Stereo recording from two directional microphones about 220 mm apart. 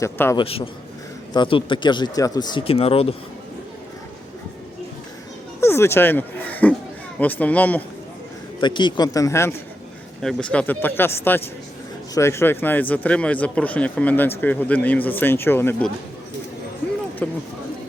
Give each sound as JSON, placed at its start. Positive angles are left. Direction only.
{"t": 0.0, "sound": "speech", "side_deg": 10}
{"t": 0.4, "sound": "speech", "side_deg": 25}
{"t": 5.5, "sound": "speech", "side_deg": 10}
{"t": 8.6, "sound": "speech", "side_deg": 20}
{"t": 10.2, "sound": "speech", "side_deg": 0}
{"t": 17.2, "sound": "a sound", "side_deg": 5}